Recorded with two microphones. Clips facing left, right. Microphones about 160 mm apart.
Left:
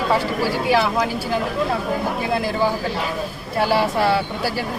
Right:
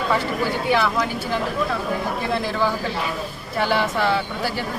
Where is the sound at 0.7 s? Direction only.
30° left (ahead or behind).